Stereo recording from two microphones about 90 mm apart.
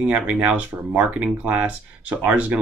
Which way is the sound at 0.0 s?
15° right (ahead or behind).